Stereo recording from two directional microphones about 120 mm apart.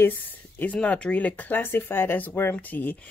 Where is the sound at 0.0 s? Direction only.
15° left (ahead or behind).